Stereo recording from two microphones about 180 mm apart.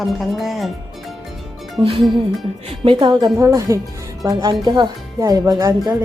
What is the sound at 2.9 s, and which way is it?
Speech, 25° right (ahead or behind).